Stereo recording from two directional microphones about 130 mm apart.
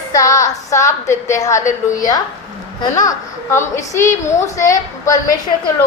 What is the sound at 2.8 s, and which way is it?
A woman's voice, 30° left (ahead or behind).